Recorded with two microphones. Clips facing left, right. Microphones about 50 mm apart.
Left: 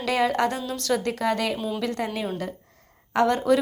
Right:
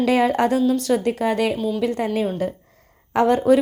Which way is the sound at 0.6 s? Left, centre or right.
Centre.